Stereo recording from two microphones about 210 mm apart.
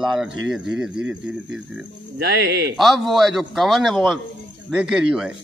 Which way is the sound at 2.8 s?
Centre (ahead or behind).